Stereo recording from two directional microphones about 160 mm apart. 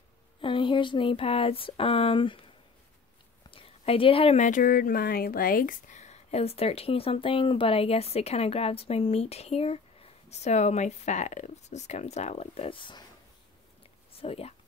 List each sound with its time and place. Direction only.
0.4 s speech: 30° left (ahead or behind)
3.4 s a sound: 35° left (ahead or behind)
4.5 s speech: 60° left (ahead or behind); by 13.0 s 30° left (ahead or behind)
14.2 s speech: 40° left (ahead or behind)